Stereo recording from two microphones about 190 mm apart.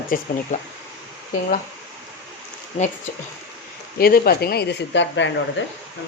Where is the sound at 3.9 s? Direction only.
50° left (ahead or behind).